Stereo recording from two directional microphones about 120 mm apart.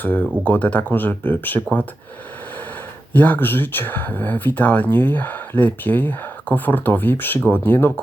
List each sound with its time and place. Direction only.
0.0 s speech: 15° left (ahead or behind)
3.1 s speech: 15° left (ahead or behind)